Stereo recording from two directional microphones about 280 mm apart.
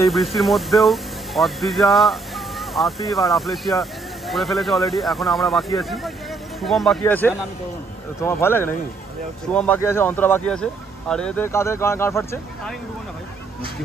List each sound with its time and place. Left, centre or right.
0.0 s speech: centre